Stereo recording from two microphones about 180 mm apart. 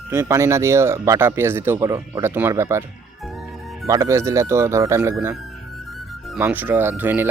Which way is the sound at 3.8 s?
15° right (ahead or behind).